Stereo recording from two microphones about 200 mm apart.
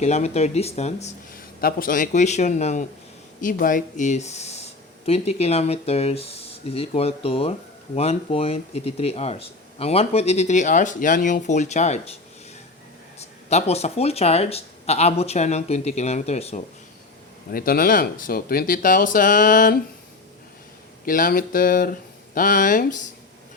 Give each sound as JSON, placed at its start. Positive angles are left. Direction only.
{"t": 0.0, "sound": "speech", "side_deg": 35}
{"t": 13.1, "sound": "speech", "side_deg": 30}
{"t": 17.5, "sound": "speech", "side_deg": 45}
{"t": 21.0, "sound": "speech", "side_deg": 45}